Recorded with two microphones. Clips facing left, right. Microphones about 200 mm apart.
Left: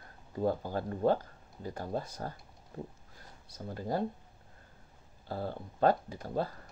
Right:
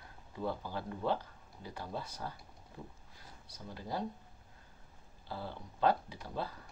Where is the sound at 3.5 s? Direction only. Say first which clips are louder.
Left 7 dB; 50° left (ahead or behind).